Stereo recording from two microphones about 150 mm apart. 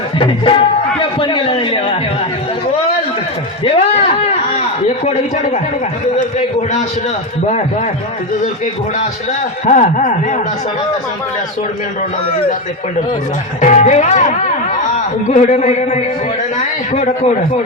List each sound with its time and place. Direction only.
0.2 s a man's voice: 35° left (ahead or behind)
3.6 s a sound: 40° left (ahead or behind)
5.0 s a man's voice: 45° left (ahead or behind)
9.6 s speech: 55° left (ahead or behind)
13.6 s a man's voice: 55° left (ahead or behind)